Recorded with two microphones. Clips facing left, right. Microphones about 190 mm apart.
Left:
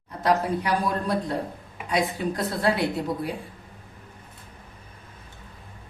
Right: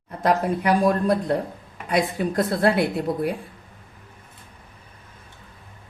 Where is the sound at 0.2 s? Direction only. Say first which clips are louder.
Right 2 dB; 50° right (ahead or behind).